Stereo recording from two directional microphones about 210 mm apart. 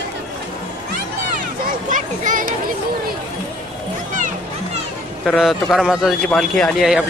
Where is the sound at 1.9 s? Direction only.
40° right (ahead or behind).